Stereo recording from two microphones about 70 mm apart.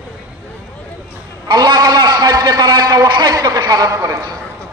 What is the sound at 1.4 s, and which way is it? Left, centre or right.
A man's voice, right.